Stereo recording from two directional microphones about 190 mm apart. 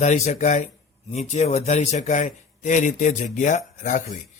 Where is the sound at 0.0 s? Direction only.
40° left (ahead or behind).